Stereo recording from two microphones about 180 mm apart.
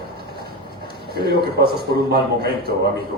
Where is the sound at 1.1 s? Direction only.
60° right (ahead or behind).